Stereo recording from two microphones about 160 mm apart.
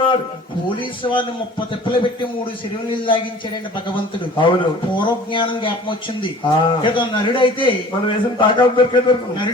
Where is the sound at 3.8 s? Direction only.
30° left (ahead or behind).